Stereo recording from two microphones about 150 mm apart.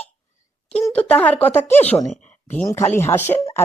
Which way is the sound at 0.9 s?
10° left (ahead or behind).